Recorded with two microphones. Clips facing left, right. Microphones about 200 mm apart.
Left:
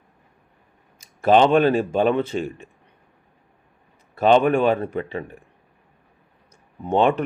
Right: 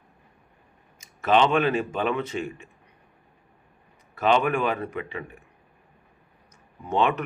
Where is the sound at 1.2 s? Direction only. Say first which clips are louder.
Left 5 dB; 35° left (ahead or behind).